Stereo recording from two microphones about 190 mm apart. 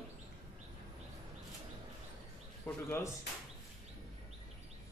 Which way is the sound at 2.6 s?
15° left (ahead or behind).